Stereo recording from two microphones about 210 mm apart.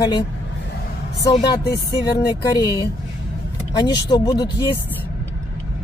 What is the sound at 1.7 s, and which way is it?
Speech, 15° left (ahead or behind).